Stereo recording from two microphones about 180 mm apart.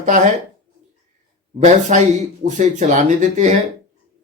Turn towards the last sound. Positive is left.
turn(degrees=-40)  # may be behind; listen again after turning